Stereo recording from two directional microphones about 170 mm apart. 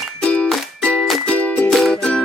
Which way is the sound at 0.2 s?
5° left (ahead or behind).